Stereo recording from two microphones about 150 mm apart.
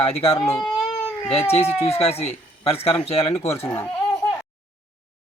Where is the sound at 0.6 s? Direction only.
Centre (ahead or behind).